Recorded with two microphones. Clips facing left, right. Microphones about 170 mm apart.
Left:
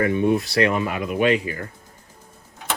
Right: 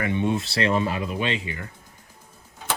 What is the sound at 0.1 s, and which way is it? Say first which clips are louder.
Speech: left 5 dB; 25° right (ahead or behind).